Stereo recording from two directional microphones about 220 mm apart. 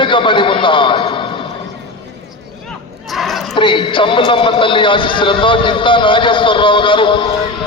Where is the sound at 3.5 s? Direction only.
20° left (ahead or behind).